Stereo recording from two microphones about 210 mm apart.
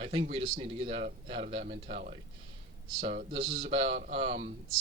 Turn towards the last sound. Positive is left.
turn(degrees=-30)  # may be behind; listen again after turning